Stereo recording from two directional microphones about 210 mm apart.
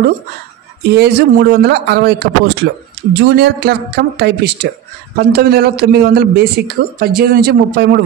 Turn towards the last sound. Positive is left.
turn(degrees=-50)  # may be behind; listen again after turning